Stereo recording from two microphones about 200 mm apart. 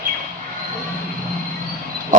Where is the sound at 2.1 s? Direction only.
40° right (ahead or behind).